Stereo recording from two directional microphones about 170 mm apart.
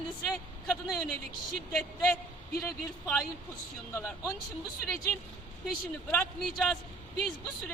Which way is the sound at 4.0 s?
15° left (ahead or behind).